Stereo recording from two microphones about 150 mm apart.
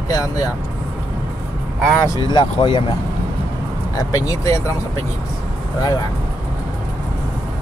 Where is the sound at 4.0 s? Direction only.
25° left (ahead or behind).